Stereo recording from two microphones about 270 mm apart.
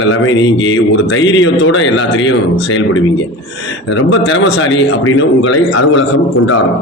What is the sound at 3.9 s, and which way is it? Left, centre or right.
A man's voice, left.